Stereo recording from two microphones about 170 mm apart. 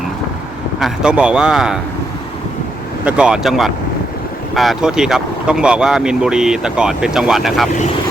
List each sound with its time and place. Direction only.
0.8 s speech: 5° right (ahead or behind)
3.0 s speech: 5° right (ahead or behind)